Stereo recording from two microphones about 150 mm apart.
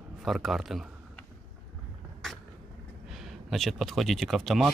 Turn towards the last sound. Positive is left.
turn(degrees=0)  # may be behind; listen again after turning